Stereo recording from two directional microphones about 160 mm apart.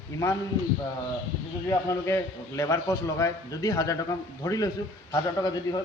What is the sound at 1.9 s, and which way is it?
A man's voice, 20° left (ahead or behind).